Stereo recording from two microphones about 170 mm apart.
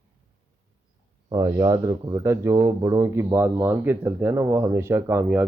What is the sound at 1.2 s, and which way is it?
Speech, 20° right (ahead or behind).